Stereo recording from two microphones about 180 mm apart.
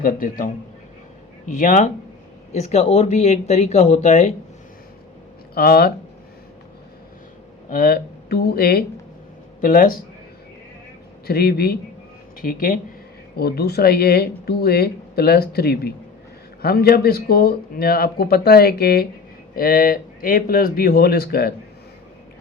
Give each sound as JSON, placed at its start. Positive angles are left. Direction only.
{"t": 0.0, "sound": "a man's voice", "side_deg": 50}
{"t": 5.5, "sound": "speech", "side_deg": 60}
{"t": 7.7, "sound": "speech", "side_deg": 55}
{"t": 11.3, "sound": "a man's voice", "side_deg": 60}
{"t": 13.3, "sound": "speech", "side_deg": 60}